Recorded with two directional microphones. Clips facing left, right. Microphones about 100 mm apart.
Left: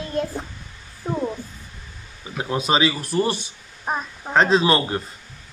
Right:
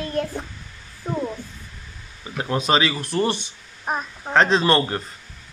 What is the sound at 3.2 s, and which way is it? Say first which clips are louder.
Speech: even; 30° right (ahead or behind).